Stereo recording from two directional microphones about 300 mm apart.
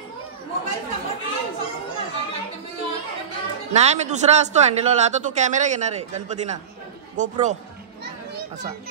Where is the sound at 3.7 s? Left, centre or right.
Right.